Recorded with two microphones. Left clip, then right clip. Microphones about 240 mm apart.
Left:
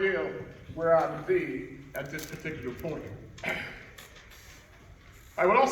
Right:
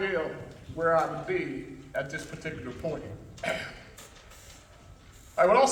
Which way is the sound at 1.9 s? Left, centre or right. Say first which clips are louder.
Right 4 dB; right.